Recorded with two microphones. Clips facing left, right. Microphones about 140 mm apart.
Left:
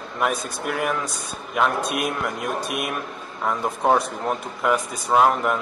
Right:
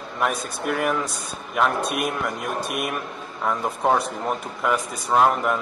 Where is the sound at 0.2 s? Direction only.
Centre (ahead or behind).